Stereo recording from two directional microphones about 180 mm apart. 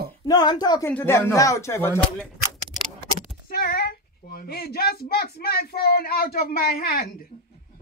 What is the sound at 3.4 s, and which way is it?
A child's voice, 55° left (ahead or behind).